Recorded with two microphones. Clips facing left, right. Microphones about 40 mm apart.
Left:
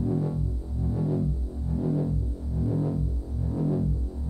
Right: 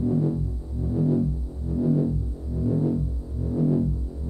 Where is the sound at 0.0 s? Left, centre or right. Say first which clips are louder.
Right 4 dB; centre.